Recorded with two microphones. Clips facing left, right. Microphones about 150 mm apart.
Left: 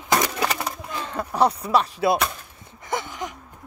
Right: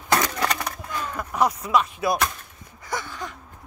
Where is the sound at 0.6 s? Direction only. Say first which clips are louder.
Even; 25° left (ahead or behind).